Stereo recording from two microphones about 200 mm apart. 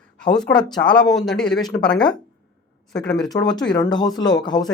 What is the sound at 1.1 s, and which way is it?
Speech, centre (ahead or behind).